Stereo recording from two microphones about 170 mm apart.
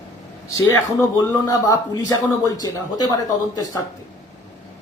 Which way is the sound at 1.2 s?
20° left (ahead or behind).